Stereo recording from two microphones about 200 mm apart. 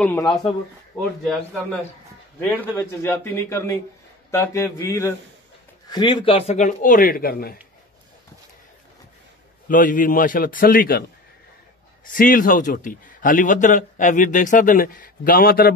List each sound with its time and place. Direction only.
0.0 s speech: 10° left (ahead or behind)
2.5 s speech: 10° left (ahead or behind); by 7.5 s 50° left (ahead or behind)
9.7 s a man's voice: 40° left (ahead or behind)
12.1 s a man's voice: 45° left (ahead or behind)